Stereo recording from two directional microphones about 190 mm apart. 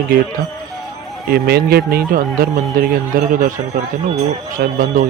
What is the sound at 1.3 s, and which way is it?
Speech, 55° right (ahead or behind).